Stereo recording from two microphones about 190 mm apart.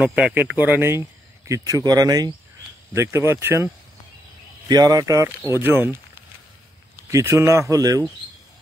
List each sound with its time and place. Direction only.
0.0 s speech: 5° right (ahead or behind)